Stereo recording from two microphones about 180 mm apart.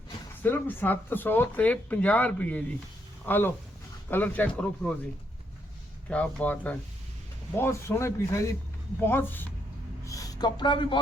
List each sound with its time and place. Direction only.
0.4 s speech: 10° left (ahead or behind)
6.1 s speech: 5° left (ahead or behind)
10.1 s a sound: 20° left (ahead or behind)